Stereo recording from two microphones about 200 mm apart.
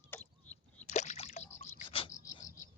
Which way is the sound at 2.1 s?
15° left (ahead or behind).